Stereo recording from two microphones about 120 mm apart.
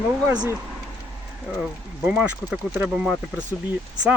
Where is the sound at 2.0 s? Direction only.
10° right (ahead or behind).